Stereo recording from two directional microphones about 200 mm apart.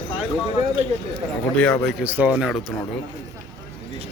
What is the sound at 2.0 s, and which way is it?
Speech, 10° right (ahead or behind).